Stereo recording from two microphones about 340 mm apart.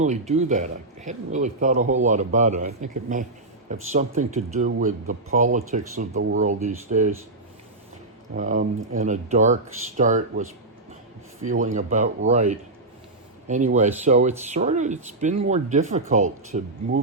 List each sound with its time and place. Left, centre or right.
0.0 s a man's voice: centre
8.4 s a man's voice: right
13.7 s a man's voice: centre